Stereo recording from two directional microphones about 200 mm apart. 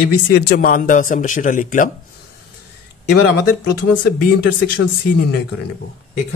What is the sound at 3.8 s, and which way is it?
Speech, 60° left (ahead or behind).